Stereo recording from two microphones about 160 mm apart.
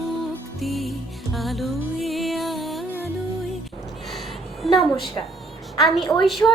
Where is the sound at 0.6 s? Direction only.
Centre (ahead or behind).